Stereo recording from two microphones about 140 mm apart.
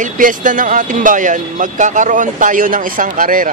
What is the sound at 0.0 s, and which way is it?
Speech, 70° right (ahead or behind).